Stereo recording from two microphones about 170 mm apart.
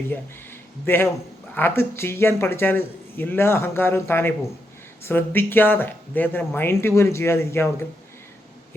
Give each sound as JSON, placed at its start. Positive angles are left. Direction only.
{"t": 0.9, "sound": "speech", "side_deg": 15}